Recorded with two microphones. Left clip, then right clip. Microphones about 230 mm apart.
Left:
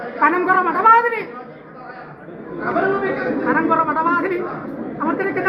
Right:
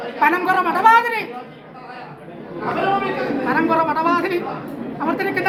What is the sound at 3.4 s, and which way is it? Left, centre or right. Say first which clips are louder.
Chatter: left 1 dB; centre.